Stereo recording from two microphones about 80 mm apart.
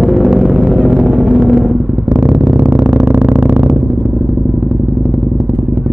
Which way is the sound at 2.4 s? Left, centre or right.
Right.